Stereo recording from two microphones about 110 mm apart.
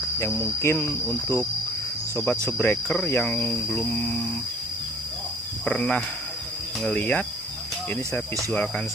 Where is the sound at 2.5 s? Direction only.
15° left (ahead or behind).